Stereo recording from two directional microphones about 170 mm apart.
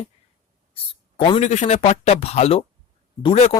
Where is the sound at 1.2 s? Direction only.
35° left (ahead or behind).